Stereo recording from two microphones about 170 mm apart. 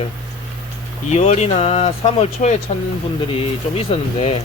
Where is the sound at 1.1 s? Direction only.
40° left (ahead or behind).